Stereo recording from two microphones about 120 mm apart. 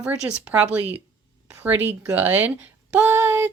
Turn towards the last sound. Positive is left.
turn(degrees=-20)  # may be behind; listen again after turning